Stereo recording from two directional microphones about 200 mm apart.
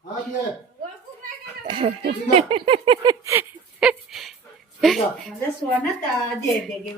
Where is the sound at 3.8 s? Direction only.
Centre (ahead or behind).